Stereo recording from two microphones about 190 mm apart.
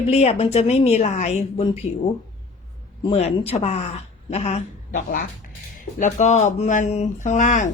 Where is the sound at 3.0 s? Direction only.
30° left (ahead or behind).